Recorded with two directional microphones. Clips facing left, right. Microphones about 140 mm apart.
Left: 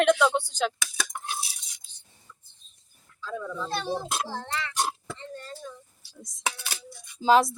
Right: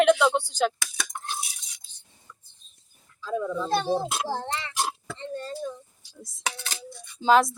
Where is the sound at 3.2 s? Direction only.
15° right (ahead or behind).